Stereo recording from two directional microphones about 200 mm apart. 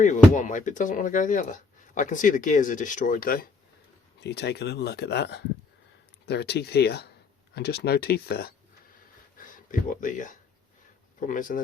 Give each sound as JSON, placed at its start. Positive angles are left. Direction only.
{"t": 0.3, "sound": "speech", "side_deg": 40}
{"t": 4.2, "sound": "speech", "side_deg": 55}